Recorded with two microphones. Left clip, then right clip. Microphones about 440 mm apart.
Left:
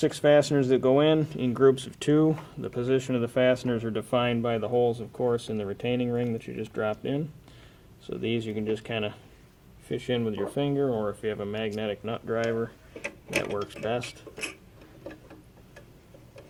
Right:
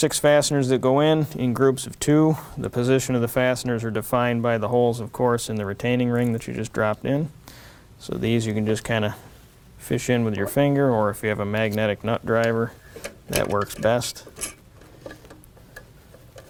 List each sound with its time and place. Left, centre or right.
0.0 s speech: right